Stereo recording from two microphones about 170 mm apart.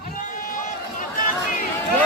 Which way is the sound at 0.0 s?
55° left (ahead or behind).